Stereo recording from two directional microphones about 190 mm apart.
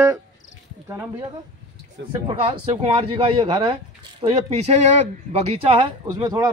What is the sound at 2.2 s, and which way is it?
Speech, 25° right (ahead or behind).